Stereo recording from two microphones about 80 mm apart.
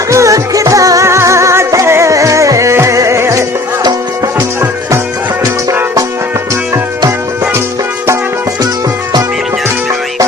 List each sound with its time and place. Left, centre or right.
0.1 s music: right